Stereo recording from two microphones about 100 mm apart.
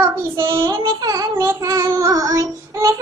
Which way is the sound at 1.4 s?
30° right (ahead or behind).